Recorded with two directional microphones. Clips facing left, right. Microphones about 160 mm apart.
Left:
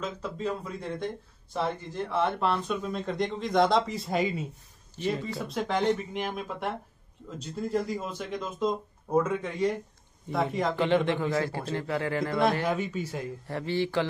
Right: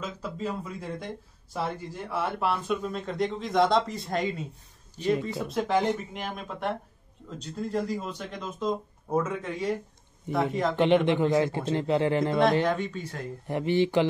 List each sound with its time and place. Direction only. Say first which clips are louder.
0.0 s speech: left 1 dB; 5° right (ahead or behind)
4.9 s speech: right 4 dB; 15° right (ahead or behind)
5.2 s speech: right 2 dB; centre (ahead or behind)
10.8 s speech: right 4 dB; 20° right (ahead or behind)
12.6 s speech: right 1 dB; 10° left (ahead or behind)
13.5 s speech: right 5 dB; 20° right (ahead or behind)